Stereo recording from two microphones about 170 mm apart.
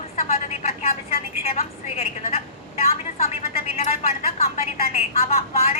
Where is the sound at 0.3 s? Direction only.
35° left (ahead or behind).